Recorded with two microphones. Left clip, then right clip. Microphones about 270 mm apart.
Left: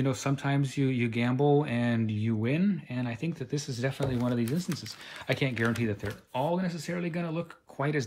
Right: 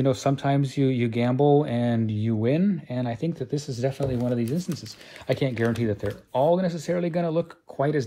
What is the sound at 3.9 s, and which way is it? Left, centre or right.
Speech, centre.